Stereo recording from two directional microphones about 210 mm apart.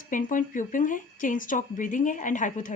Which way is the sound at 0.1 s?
40° left (ahead or behind).